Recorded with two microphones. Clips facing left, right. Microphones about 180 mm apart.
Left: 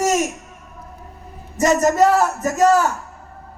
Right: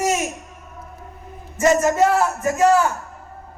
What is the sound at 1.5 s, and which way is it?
A man's voice, 40° left (ahead or behind).